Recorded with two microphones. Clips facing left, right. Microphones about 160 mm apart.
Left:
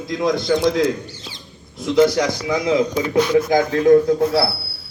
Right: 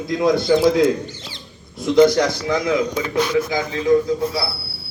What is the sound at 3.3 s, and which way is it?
Speech, 50° left (ahead or behind).